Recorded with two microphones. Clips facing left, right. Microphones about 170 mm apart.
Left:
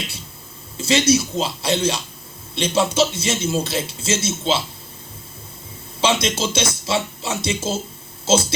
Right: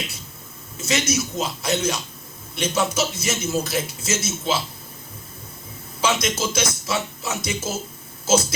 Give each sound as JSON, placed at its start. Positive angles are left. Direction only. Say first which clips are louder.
{"t": 0.8, "sound": "speech", "louder": "left 6 dB", "side_deg": 30}
{"t": 6.0, "sound": "speech", "louder": "left 3 dB", "side_deg": 30}